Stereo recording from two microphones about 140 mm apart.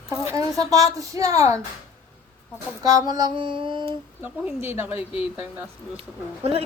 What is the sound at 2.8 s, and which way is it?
Female singing, 25° right (ahead or behind).